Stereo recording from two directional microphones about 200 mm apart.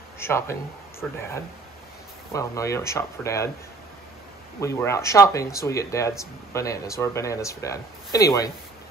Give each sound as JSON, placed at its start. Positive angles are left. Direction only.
{"t": 0.2, "sound": "speech", "side_deg": 10}
{"t": 2.3, "sound": "speech", "side_deg": 15}
{"t": 4.6, "sound": "speech", "side_deg": 15}